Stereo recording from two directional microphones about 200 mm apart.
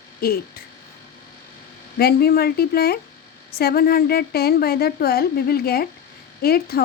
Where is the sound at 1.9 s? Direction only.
50° left (ahead or behind).